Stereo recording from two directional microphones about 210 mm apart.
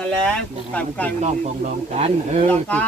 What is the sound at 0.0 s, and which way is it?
Speech, 5° left (ahead or behind).